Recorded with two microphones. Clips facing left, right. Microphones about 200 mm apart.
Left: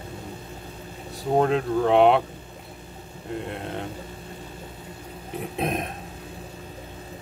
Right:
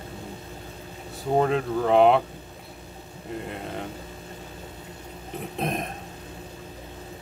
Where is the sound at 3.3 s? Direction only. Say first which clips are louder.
Left 2 dB; centre (ahead or behind).